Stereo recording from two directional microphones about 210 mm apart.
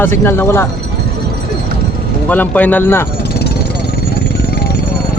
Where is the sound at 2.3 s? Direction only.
10° left (ahead or behind).